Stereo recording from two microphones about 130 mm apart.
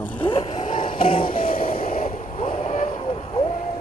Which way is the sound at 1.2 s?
90° left.